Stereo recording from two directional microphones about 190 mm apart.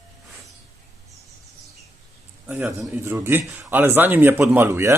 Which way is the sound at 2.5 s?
10° right (ahead or behind).